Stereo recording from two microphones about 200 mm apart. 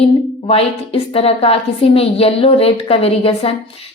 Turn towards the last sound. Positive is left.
turn(degrees=30)  # may be behind; listen again after turning